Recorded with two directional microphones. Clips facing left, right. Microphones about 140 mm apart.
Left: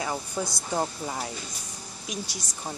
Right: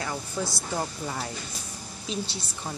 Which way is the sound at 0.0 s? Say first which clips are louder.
Left 1 dB; 20° left (ahead or behind).